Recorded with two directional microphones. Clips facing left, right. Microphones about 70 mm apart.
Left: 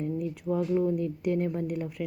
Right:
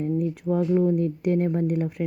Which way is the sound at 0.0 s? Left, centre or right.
Right.